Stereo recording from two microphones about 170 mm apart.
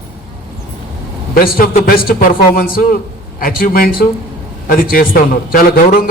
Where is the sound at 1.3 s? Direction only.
60° left (ahead or behind).